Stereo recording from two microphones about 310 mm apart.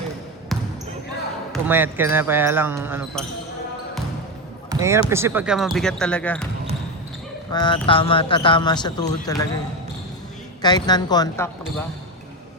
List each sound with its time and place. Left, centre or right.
0.5 s basketball bounce: centre
1.6 s speech: centre
4.7 s speech: centre
7.5 s a man's voice: centre
10.6 s a man's voice: centre